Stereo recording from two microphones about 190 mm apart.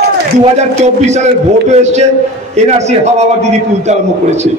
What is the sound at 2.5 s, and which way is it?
A man's voice, 35° right (ahead or behind).